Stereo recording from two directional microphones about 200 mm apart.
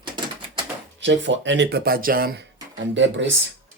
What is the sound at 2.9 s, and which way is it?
Speech, 65° right (ahead or behind).